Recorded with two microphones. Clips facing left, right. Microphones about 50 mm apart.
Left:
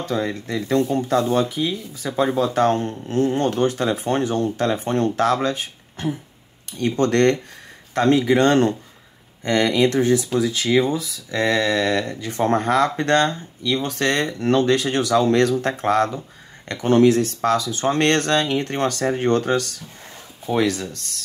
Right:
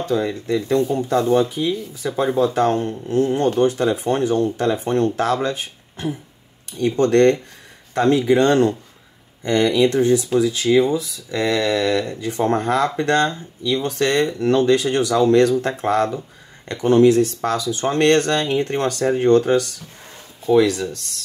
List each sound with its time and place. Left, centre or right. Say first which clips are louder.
0.0 s speech: right 3 dB; left